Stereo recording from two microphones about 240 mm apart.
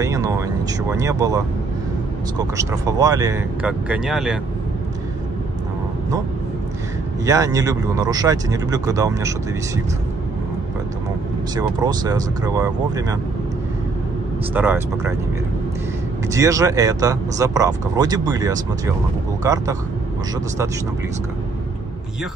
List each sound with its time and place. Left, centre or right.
0.0 s speech: centre
7.2 s speech: centre
11.5 s speech: centre
14.5 s speech: centre
16.3 s speech: centre